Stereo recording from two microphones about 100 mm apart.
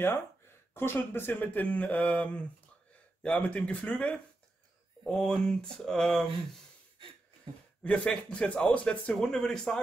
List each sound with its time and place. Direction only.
0.7 s speech: 20° left (ahead or behind); by 6.2 s 5° left (ahead or behind)
7.8 s speech: 10° left (ahead or behind)